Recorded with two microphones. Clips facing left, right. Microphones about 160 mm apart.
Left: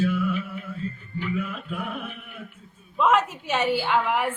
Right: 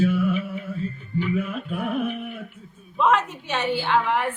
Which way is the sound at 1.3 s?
40° right (ahead or behind).